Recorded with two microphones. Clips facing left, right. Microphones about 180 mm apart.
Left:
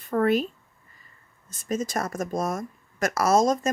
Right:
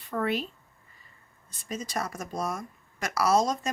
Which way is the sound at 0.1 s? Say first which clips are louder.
Left 7 dB; 45° left (ahead or behind).